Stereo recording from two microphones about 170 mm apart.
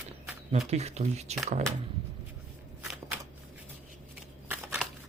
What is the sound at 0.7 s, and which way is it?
Speech, 40° right (ahead or behind).